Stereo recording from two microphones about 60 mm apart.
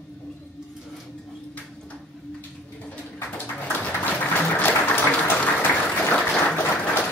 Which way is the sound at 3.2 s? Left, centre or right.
Left.